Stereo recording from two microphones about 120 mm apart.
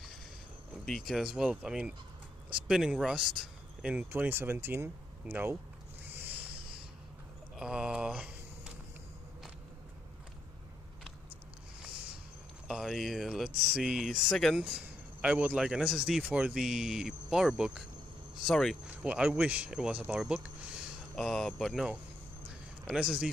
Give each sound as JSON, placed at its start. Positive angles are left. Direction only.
{"t": 0.8, "sound": "speech", "side_deg": 0}
{"t": 4.1, "sound": "speech", "side_deg": -20}
{"t": 6.0, "sound": "a sound", "side_deg": -15}
{"t": 7.5, "sound": "a sound", "side_deg": -5}
{"t": 12.6, "sound": "a man's voice", "side_deg": 0}
{"t": 19.0, "sound": "speech", "side_deg": -10}
{"t": 21.2, "sound": "a man's voice", "side_deg": 5}